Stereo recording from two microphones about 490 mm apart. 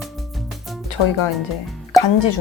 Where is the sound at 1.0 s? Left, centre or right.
Left.